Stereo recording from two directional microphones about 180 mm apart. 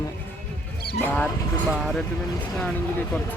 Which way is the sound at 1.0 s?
10° left (ahead or behind).